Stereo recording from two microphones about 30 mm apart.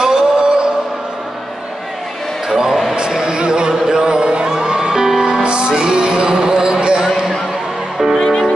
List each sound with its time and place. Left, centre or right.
0.0 s music: right
2.7 s a sound: centre
3.1 s crowd: right
5.4 s music: right
6.3 s a sound: right
8.2 s music: centre